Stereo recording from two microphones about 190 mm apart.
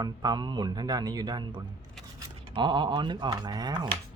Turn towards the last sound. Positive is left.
turn(degrees=-20)  # may be behind; listen again after turning